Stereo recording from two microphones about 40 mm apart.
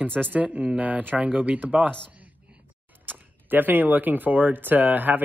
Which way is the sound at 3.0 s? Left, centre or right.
Right.